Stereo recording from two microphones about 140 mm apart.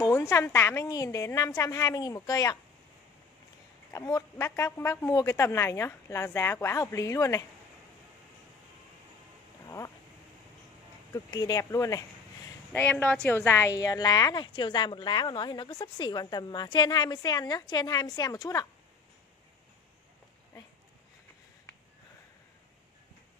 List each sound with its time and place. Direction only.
0.1 s a woman's voice: 20° left (ahead or behind)
3.9 s a woman's voice: 25° left (ahead or behind)
9.7 s a sound: 25° left (ahead or behind)
11.1 s a woman's voice: 25° left (ahead or behind)
12.7 s a woman's voice: 10° left (ahead or behind)